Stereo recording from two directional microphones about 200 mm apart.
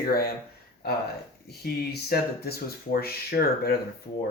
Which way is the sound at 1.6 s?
50° left (ahead or behind).